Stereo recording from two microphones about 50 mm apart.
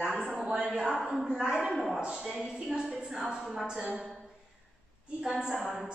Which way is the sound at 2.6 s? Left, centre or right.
Centre.